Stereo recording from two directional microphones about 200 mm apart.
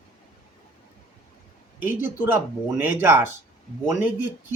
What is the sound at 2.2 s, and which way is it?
Speech, 10° right (ahead or behind).